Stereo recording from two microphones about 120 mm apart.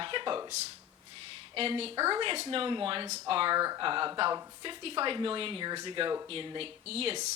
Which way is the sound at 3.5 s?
35° right (ahead or behind).